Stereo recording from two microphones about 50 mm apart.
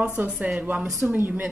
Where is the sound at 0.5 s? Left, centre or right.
Right.